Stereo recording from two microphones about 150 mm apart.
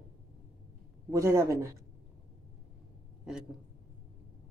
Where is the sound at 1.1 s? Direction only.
20° right (ahead or behind).